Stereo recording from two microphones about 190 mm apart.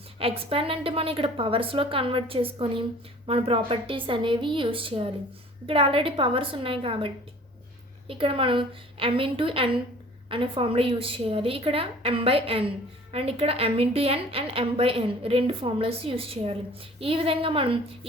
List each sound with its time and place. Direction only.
0.2 s a woman's voice: 30° right (ahead or behind)